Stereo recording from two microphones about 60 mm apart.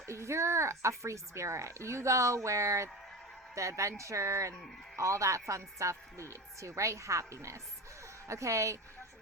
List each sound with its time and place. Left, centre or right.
0.0 s a woman's voice: right